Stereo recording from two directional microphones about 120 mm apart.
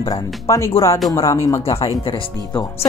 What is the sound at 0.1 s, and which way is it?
Speech, 25° left (ahead or behind).